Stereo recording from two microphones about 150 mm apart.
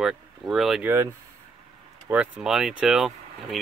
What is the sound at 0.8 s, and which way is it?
Speech, 15° right (ahead or behind).